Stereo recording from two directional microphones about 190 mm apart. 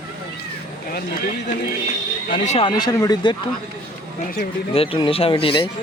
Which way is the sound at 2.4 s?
30° left (ahead or behind).